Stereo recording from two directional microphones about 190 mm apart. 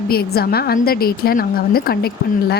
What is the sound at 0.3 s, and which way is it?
A woman's voice, 55° left (ahead or behind).